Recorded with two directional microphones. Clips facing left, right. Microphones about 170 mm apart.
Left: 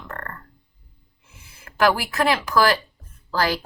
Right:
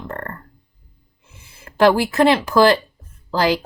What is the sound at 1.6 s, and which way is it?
Speech, 30° right (ahead or behind).